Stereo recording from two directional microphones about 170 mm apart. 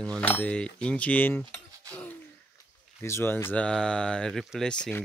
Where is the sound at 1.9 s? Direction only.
10° left (ahead or behind).